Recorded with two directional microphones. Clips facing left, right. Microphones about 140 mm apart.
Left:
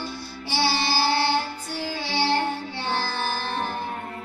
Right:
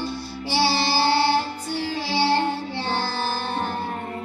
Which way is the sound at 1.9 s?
30° right (ahead or behind).